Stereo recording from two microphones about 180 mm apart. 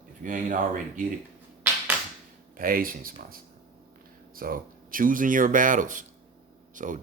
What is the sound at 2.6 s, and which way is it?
Speech, 50° right (ahead or behind).